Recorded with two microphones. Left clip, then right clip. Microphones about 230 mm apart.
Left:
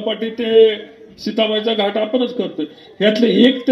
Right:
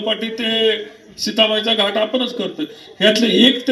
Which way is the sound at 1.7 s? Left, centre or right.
Right.